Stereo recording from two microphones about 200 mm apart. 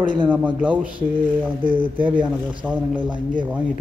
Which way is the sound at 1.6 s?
25° right (ahead or behind).